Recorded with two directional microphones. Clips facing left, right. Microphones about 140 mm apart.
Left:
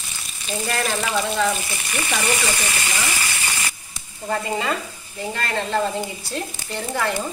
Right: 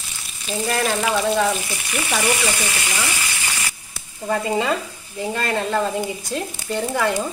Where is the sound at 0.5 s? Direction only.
10° right (ahead or behind).